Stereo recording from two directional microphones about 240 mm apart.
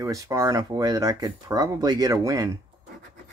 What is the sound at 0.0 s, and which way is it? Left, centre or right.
Speech, centre.